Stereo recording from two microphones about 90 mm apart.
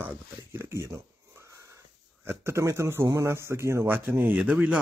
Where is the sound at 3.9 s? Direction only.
20° right (ahead or behind).